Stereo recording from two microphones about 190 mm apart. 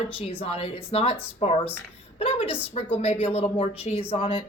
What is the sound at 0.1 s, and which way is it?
Speech, 30° left (ahead or behind).